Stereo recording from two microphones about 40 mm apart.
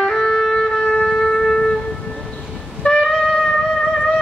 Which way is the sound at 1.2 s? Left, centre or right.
Centre.